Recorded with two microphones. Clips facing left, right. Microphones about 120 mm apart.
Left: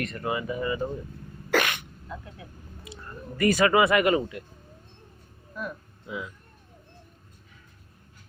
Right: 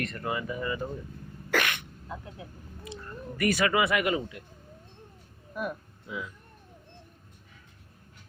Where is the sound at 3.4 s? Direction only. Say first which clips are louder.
Left 5 dB; 35° left (ahead or behind); by 4.4 s 60° left (ahead or behind).